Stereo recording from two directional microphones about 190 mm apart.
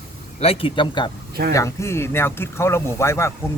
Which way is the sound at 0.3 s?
30° left (ahead or behind).